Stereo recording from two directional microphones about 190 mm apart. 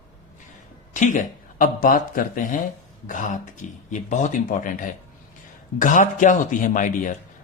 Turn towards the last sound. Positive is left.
turn(degrees=45)  # may be behind; listen again after turning